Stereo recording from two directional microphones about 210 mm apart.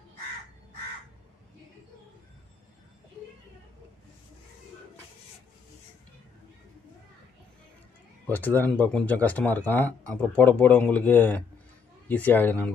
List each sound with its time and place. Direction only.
8.3 s speech: 10° left (ahead or behind)